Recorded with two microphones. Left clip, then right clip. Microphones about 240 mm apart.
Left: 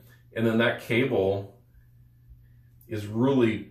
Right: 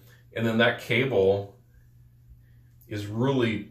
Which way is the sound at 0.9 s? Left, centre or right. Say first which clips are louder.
Even; centre.